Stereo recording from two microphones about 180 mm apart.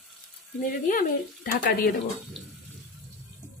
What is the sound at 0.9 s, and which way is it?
Speech, 55° left (ahead or behind).